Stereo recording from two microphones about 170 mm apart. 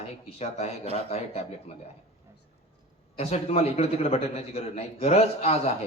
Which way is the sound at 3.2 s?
40° left (ahead or behind).